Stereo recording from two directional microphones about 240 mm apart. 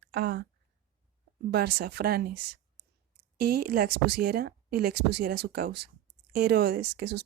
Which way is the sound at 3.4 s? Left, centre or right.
Right.